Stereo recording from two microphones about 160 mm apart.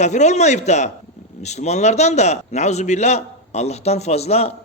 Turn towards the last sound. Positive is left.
turn(degrees=40)  # may be behind; listen again after turning